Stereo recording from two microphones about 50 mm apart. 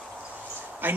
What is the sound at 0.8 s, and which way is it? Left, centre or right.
Speech, right.